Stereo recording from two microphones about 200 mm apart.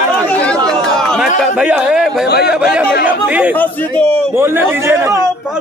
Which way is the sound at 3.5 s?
10° left (ahead or behind).